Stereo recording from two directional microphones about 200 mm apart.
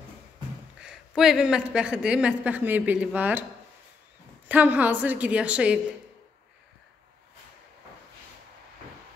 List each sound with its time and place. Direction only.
0.7 s a woman's voice: 5° right (ahead or behind)
4.5 s a woman's voice: 10° right (ahead or behind)